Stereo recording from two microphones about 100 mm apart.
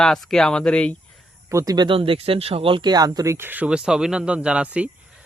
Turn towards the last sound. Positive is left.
turn(degrees=-10)  # may be behind; listen again after turning